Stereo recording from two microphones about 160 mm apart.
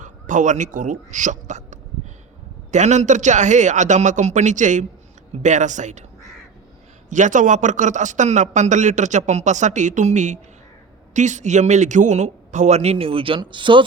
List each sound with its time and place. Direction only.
0.0 s a man's voice: 50° right (ahead or behind)
7.1 s a man's voice: 50° right (ahead or behind); by 13.8 s 30° right (ahead or behind)